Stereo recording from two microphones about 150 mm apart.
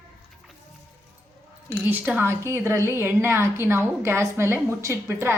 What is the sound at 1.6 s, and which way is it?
A woman's voice, 10° right (ahead or behind).